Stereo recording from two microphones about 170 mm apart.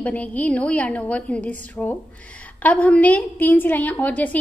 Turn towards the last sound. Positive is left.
turn(degrees=10)  # may be behind; listen again after turning